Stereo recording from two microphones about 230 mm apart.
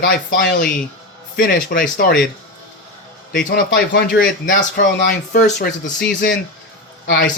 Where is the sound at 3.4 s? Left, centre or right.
Left.